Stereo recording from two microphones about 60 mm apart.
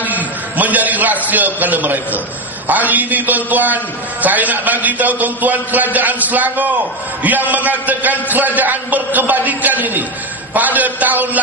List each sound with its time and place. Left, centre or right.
0.1 s a man's voice: right